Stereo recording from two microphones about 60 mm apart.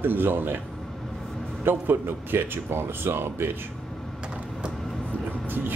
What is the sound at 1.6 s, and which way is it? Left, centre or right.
Speech, right.